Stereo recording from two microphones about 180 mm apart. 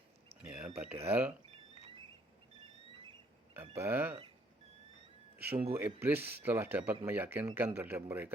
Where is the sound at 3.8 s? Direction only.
10° right (ahead or behind).